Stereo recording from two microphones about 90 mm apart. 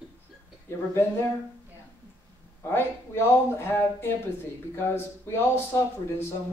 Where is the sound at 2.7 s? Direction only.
25° left (ahead or behind).